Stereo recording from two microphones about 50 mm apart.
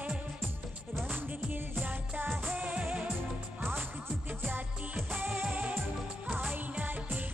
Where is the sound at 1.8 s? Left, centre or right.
Right.